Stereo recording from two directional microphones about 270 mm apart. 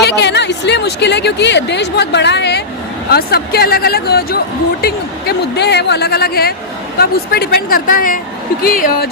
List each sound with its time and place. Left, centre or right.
0.0 s a woman's voice: left